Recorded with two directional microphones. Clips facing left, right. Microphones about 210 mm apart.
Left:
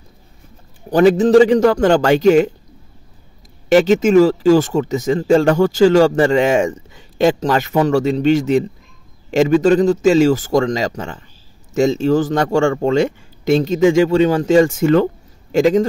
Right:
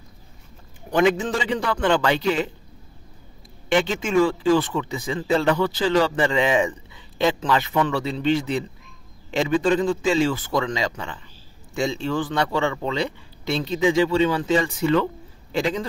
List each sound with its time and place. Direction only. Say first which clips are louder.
0.8 s speech: left 8 dB; 35° left (ahead or behind)
3.6 s speech: left 10 dB; 40° left (ahead or behind)